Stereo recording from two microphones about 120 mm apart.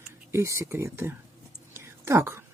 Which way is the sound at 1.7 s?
20° right (ahead or behind).